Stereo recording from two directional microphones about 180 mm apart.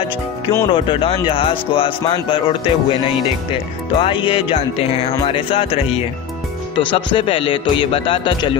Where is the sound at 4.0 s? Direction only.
30° left (ahead or behind).